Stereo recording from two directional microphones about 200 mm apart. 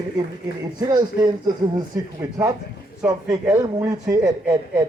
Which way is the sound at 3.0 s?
15° right (ahead or behind).